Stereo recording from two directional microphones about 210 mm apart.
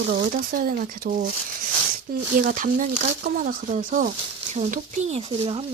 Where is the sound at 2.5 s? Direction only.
40° right (ahead or behind).